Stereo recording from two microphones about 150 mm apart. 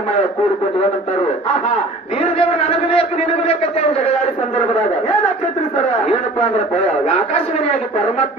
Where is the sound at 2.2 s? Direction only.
40° left (ahead or behind).